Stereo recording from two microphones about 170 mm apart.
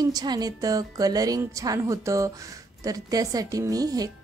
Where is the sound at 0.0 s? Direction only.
25° right (ahead or behind).